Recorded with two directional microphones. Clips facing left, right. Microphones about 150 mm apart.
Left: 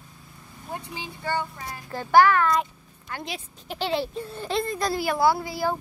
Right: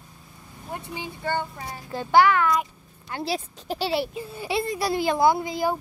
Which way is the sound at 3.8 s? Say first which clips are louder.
Even; 10° right (ahead or behind).